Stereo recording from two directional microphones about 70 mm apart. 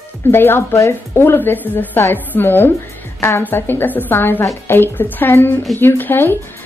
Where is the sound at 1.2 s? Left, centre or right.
Left.